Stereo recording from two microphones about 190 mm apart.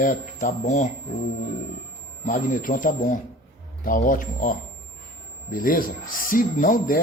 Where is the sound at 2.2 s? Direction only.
45° left (ahead or behind).